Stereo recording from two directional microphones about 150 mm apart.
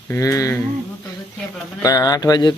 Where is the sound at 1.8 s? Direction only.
25° left (ahead or behind).